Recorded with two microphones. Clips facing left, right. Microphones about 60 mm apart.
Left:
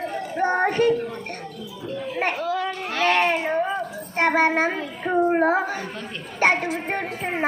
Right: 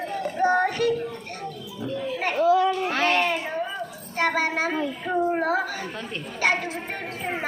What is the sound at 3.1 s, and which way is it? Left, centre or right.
A child's voice, left.